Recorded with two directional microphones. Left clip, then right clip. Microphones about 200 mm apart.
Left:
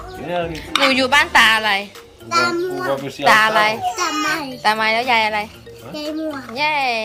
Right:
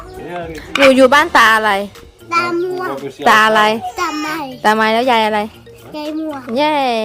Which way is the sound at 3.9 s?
25° right (ahead or behind).